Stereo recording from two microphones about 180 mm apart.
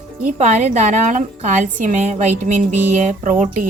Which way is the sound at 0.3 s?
40° right (ahead or behind).